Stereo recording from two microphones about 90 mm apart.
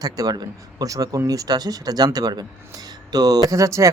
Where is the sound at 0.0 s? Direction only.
50° right (ahead or behind).